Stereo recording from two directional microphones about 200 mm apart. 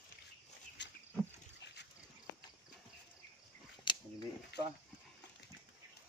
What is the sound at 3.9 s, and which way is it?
Camera, 25° left (ahead or behind).